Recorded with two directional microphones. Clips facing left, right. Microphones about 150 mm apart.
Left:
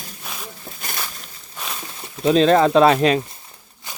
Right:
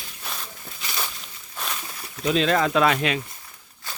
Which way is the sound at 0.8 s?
50° left (ahead or behind).